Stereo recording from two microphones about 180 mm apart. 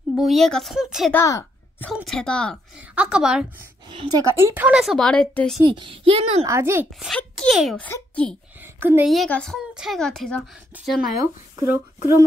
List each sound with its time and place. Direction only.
0.1 s speech: centre (ahead or behind)
1.1 s a sound: 15° left (ahead or behind)
2.0 s speech: centre (ahead or behind)
3.9 s a woman's voice: 25° right (ahead or behind)
4.6 s speech: 5° right (ahead or behind)
5.6 s a woman's voice: 25° right (ahead or behind)
6.4 s speech: 15° right (ahead or behind)
7.1 s a child's voice: centre (ahead or behind)
8.7 s a woman's voice: 10° right (ahead or behind)
9.1 s speech: centre (ahead or behind)
11.5 s speech: 20° right (ahead or behind)